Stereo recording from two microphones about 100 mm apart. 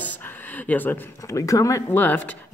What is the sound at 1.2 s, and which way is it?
Speech, 30° left (ahead or behind).